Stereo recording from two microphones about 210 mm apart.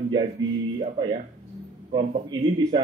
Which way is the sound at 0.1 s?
20° right (ahead or behind).